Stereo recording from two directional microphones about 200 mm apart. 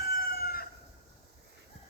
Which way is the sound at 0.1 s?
50° left (ahead or behind).